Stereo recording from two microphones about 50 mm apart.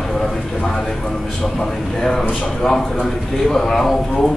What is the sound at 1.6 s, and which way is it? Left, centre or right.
A man's voice, centre.